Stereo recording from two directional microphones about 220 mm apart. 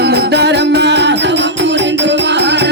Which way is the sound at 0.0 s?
50° right (ahead or behind).